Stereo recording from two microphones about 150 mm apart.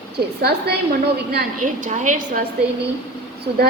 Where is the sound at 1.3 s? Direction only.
60° right (ahead or behind).